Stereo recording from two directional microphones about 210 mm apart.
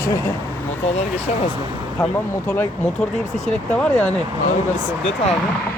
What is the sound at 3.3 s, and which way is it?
Speech, 5° left (ahead or behind).